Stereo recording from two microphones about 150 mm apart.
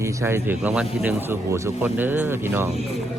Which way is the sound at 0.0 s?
20° right (ahead or behind).